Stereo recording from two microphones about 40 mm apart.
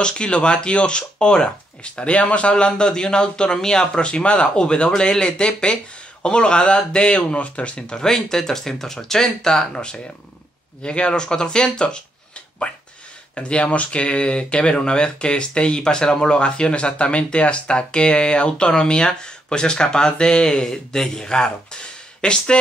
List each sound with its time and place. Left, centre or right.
0.0 s speech: left
2.5 s speech: left
8.1 s speech: centre
12.7 s speech: left